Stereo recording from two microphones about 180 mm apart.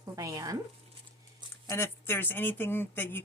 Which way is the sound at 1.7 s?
15° left (ahead or behind).